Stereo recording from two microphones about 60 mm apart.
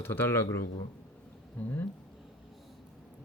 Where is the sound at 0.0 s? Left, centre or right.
Left.